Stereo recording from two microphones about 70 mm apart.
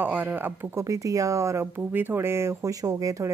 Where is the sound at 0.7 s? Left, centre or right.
Right.